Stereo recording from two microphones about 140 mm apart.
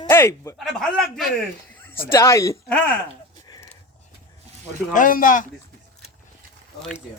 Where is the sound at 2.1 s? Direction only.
20° left (ahead or behind).